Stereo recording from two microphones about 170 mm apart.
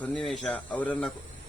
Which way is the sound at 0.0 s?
5° left (ahead or behind).